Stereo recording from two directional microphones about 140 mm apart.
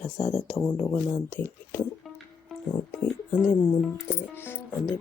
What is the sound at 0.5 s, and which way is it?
Speech, 20° left (ahead or behind).